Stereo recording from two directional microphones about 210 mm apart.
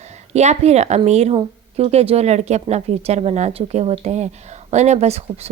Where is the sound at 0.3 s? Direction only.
30° right (ahead or behind).